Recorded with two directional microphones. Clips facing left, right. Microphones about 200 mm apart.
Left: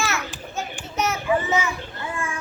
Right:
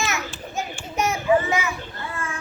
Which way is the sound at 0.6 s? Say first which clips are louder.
Right 1 dB; 15° right (ahead or behind).